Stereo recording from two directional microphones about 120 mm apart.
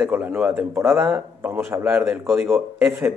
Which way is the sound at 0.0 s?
15° right (ahead or behind).